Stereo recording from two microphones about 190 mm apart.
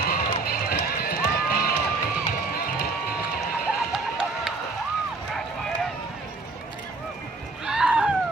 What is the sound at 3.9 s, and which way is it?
Music, centre (ahead or behind).